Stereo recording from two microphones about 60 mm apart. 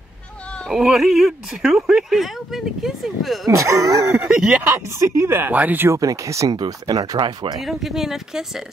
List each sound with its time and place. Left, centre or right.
0.7 s speech: centre
3.4 s speech: right
4.3 s speech: centre
4.6 s speech: right
5.5 s speech: right
5.9 s speech: right
7.5 s speech: centre